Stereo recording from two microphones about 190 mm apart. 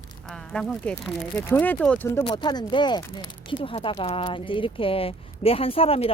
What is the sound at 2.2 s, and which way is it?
Speech, 25° left (ahead or behind).